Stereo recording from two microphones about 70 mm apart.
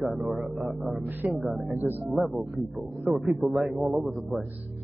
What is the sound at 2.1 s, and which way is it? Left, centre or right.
A man's voice, centre.